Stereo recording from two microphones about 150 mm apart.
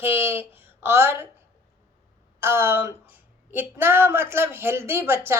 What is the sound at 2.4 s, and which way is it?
Speech, 15° right (ahead or behind).